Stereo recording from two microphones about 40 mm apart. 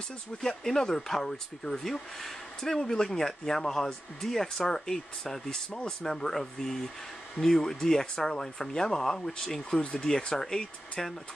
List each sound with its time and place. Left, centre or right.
0.4 s speech: centre
9.8 s speech: left
10.0 s speech: centre